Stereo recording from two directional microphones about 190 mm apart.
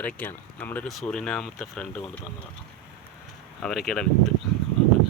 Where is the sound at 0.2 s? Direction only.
10° left (ahead or behind).